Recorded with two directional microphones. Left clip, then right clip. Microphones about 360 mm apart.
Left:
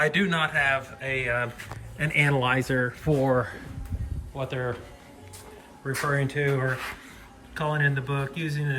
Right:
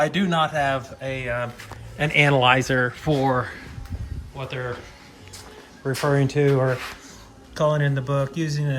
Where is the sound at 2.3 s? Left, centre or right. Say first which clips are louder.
Right 7 dB; left.